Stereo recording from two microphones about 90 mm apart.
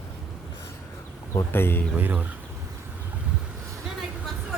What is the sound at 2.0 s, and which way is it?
Speech, 20° right (ahead or behind).